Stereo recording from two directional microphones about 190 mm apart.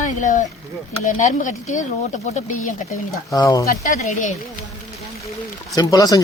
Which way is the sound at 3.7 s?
40° left (ahead or behind).